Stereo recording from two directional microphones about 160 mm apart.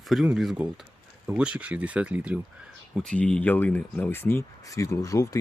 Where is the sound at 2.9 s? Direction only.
5° left (ahead or behind).